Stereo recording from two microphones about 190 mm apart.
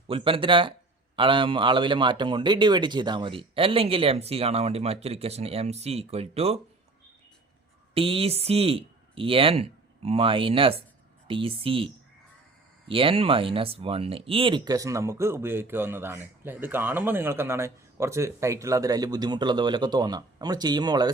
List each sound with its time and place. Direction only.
0.1 s speech: 30° right (ahead or behind)
7.9 s speech: 30° right (ahead or behind)
12.9 s speech: 30° right (ahead or behind)